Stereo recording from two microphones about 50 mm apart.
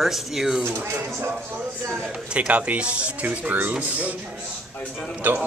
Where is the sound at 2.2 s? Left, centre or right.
Right.